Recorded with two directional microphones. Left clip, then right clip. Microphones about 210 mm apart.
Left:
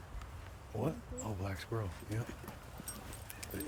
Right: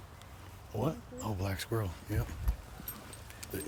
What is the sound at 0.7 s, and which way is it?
Speech, 50° right (ahead or behind).